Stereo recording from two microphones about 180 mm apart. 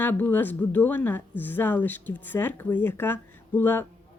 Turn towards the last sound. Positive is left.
turn(degrees=10)  # may be behind; listen again after turning